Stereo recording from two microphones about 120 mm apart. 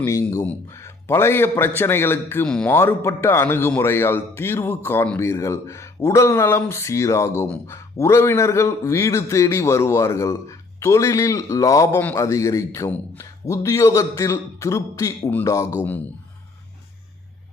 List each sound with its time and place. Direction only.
0.0 s a man's voice: 25° left (ahead or behind)
7.4 s speech: 10° left (ahead or behind)
7.9 s a man's voice: 25° left (ahead or behind)